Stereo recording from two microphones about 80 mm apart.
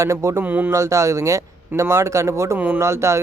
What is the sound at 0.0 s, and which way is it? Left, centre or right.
Speech, right.